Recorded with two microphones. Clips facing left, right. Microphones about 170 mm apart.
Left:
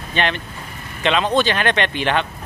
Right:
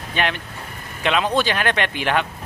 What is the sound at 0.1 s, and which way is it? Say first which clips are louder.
Speech: left 2 dB; 5° right (ahead or behind).